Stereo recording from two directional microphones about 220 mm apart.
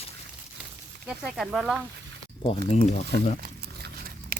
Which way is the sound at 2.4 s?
25° left (ahead or behind).